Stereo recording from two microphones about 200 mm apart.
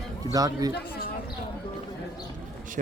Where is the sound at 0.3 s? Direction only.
20° right (ahead or behind).